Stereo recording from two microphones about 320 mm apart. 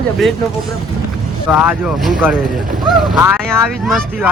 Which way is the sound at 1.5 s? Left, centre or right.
Centre.